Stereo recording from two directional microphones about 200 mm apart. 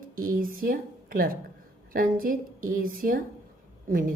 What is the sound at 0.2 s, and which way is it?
A woman's voice, 45° right (ahead or behind).